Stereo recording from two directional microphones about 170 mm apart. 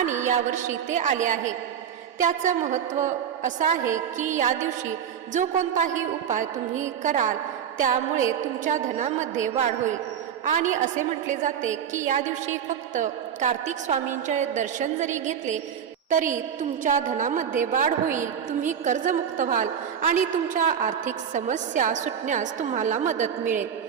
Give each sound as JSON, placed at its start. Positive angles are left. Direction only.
{"t": 0.0, "sound": "a woman's voice", "side_deg": -45}